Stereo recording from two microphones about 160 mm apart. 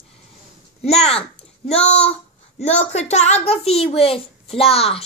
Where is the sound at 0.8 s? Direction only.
40° left (ahead or behind).